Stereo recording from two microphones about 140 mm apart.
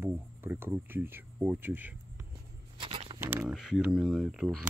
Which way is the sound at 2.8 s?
35° right (ahead or behind).